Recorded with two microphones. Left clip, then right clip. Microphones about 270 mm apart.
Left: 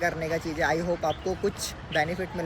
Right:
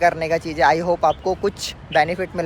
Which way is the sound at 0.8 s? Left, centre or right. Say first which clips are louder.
Right 10 dB; centre.